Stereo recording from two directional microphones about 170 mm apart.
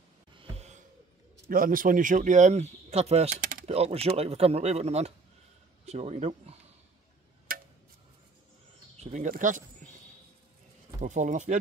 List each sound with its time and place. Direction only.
0.4 s a sound: 40° right (ahead or behind)
1.5 s speech: 55° right (ahead or behind); by 3.3 s 40° right (ahead or behind)
3.3 s a sound: 50° right (ahead or behind)
3.7 s speech: 35° right (ahead or behind)
7.5 s tick-tock: 55° right (ahead or behind)
9.0 s speech: 45° right (ahead or behind)
11.0 s speech: 45° right (ahead or behind)